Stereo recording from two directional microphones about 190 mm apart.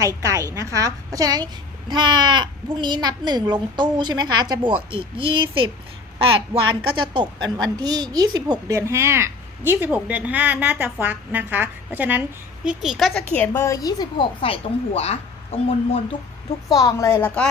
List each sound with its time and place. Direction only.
0.0 s a woman's voice: 15° right (ahead or behind); by 16.0 s 30° left (ahead or behind)
16.7 s a woman's voice: 15° left (ahead or behind)